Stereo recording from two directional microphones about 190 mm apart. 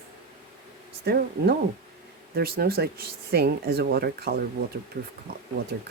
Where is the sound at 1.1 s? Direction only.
55° right (ahead or behind).